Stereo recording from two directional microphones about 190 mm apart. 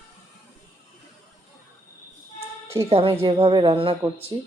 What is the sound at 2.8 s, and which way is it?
A woman's voice, 30° right (ahead or behind).